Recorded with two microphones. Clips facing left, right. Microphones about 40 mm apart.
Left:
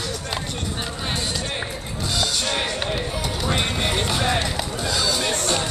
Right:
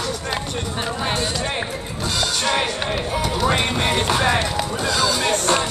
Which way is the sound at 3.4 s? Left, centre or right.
Right.